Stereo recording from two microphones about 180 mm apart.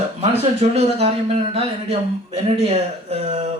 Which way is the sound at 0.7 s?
35° right (ahead or behind).